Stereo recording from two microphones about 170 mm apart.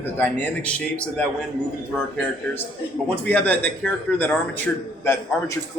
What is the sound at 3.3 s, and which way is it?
A man's voice, 10° left (ahead or behind).